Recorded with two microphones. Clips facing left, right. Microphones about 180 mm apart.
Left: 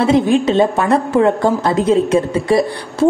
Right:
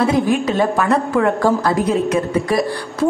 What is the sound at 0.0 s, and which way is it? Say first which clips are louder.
A woman's voice: left 3 dB; 25° left (ahead or behind).